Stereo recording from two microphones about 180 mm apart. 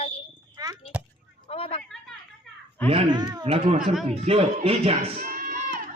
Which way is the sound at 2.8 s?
30° right (ahead or behind).